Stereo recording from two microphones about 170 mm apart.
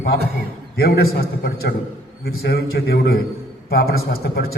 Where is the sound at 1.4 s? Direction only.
70° left (ahead or behind).